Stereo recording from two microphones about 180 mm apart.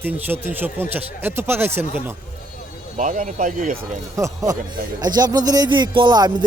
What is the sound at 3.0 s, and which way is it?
Speech, 45° right (ahead or behind).